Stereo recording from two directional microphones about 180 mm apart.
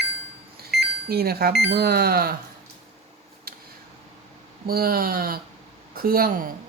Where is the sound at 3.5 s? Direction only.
55° right (ahead or behind).